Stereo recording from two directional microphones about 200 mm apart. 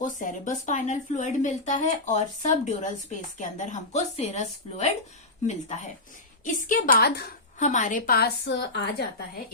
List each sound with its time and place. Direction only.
0.0 s a woman's voice: 40° left (ahead or behind)
7.6 s a woman's voice: 40° left (ahead or behind); by 9.2 s 55° left (ahead or behind)